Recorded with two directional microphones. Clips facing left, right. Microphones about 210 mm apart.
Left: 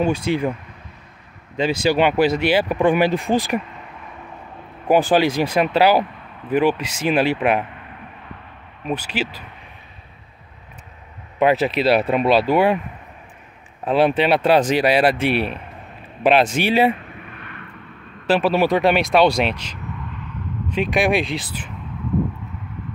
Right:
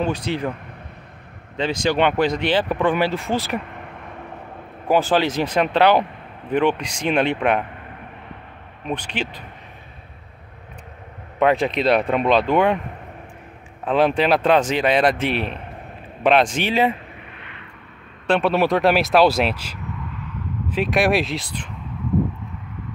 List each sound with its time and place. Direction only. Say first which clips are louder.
0.0 s speech: left 3 dB; 10° left (ahead or behind)
1.6 s speech: left 2 dB; 10° left (ahead or behind)
3.6 s a sound: right 2 dB; 55° right (ahead or behind)
4.8 s speech: left 2 dB; 15° left (ahead or behind)
8.8 s speech: left 2 dB; 5° left (ahead or behind)
11.3 s speech: left 1 dB; 5° left (ahead or behind)
13.8 s speech: left 1 dB; 5° left (ahead or behind)
17.4 s vehicle: left 3 dB; 20° right (ahead or behind)
18.2 s speech: left 1 dB; 5° left (ahead or behind)